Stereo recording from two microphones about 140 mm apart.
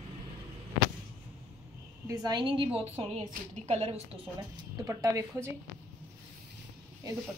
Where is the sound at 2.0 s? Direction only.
25° right (ahead or behind); by 4.3 s 45° right (ahead or behind).